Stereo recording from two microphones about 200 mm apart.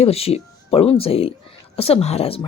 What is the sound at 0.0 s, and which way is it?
Speech, 30° left (ahead or behind).